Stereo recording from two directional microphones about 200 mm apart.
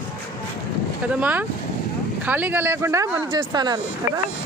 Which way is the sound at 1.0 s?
5° right (ahead or behind).